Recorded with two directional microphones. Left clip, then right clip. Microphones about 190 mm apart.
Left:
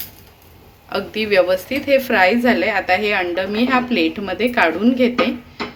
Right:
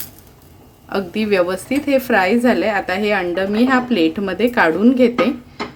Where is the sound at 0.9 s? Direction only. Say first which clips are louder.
Even; 45° right (ahead or behind).